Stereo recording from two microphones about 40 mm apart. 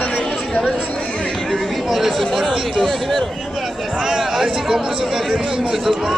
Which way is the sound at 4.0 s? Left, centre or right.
Centre.